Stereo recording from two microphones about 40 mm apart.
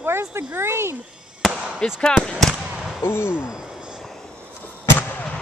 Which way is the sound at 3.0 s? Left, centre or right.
Left.